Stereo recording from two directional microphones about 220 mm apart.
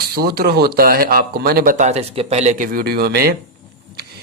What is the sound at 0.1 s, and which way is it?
Speech, 45° right (ahead or behind).